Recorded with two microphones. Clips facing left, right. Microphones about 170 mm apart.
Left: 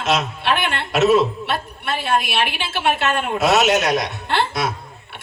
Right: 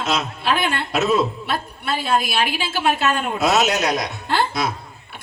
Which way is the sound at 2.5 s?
40° right (ahead or behind).